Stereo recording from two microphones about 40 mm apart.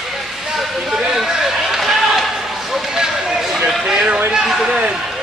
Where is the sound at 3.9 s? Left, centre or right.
Right.